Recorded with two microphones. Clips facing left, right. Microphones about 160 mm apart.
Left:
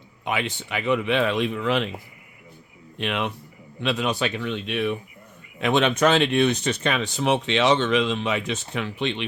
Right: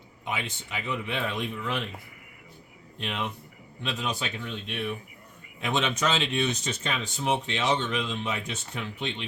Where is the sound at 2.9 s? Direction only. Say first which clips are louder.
Left 6 dB; 80° left.